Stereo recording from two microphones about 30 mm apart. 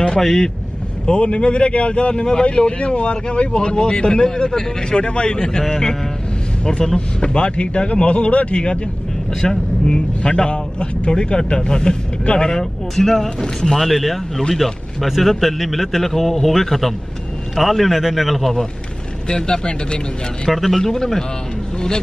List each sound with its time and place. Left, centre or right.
0.2 s a man's voice: centre
1.0 s speech: left
4.9 s speech: left
9.4 s speech: left
9.9 s speech: left
12.5 s a man's voice: centre
19.2 s speech: left
20.4 s a man's voice: centre